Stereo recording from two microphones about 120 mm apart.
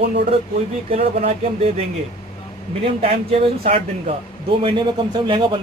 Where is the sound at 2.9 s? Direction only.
60° right (ahead or behind).